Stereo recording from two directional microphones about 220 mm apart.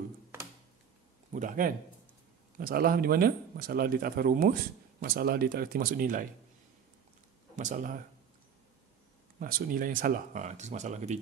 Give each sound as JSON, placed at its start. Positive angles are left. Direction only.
{"t": 1.3, "sound": "speech", "side_deg": -35}
{"t": 7.5, "sound": "speech", "side_deg": -35}
{"t": 9.4, "sound": "speech", "side_deg": -40}